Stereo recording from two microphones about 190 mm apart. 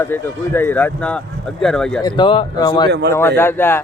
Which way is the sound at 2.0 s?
25° left (ahead or behind).